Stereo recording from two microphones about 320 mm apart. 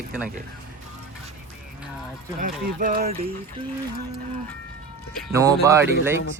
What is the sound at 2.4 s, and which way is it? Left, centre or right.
Speech, right.